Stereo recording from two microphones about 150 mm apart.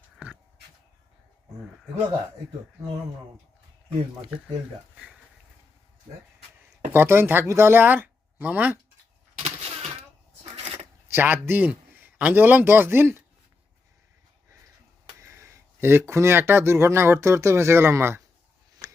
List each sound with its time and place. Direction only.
6.9 s speech: 15° right (ahead or behind)
9.4 s a sound: 45° right (ahead or behind)
11.1 s a man's voice: 15° right (ahead or behind)
15.2 s speech: 20° right (ahead or behind)